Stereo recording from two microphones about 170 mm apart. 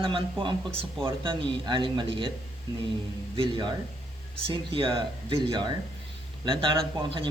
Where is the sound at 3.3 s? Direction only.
30° right (ahead or behind).